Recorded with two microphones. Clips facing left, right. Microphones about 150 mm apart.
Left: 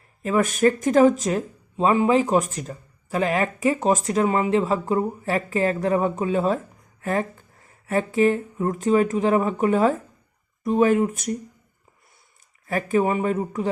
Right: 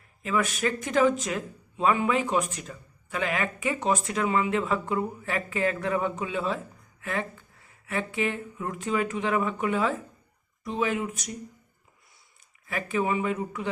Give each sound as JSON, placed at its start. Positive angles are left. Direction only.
{"t": 0.2, "sound": "speech", "side_deg": 45}
{"t": 12.6, "sound": "speech", "side_deg": 45}